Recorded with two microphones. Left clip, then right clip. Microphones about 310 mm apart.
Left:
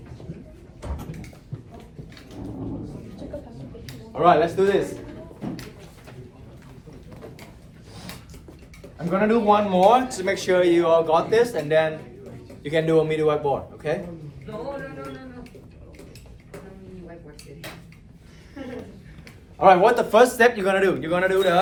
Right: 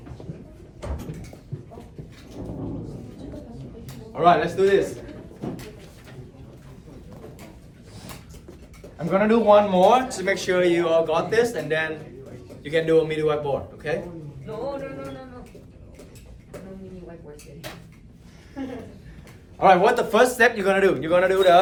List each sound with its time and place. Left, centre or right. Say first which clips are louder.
4.1 s speech: left 1 dB; centre
9.0 s a man's voice: right 1 dB; centre
19.5 s speech: left 1 dB; centre